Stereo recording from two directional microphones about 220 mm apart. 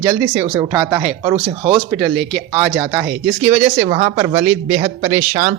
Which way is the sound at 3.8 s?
25° right (ahead or behind).